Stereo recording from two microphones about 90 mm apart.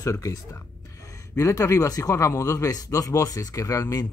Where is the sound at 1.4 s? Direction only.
35° left (ahead or behind).